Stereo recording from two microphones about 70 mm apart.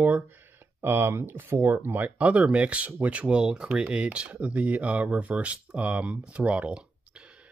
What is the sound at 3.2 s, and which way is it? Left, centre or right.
Speech, centre.